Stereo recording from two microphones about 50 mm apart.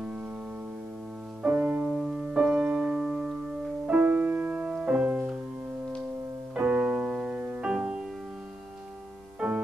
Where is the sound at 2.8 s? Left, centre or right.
Centre.